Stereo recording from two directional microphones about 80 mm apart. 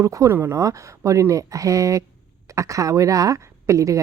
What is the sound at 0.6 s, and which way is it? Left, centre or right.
Speech, right.